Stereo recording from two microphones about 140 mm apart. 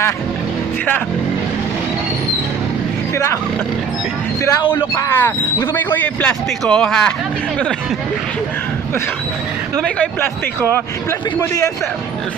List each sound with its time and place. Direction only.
4.7 s speech: 20° left (ahead or behind)
9.8 s speech: 5° left (ahead or behind)
11.3 s a man's voice: 25° left (ahead or behind)